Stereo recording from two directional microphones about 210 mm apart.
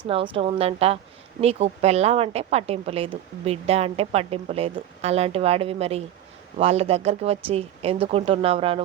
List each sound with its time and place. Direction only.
0.1 s speech: 25° right (ahead or behind)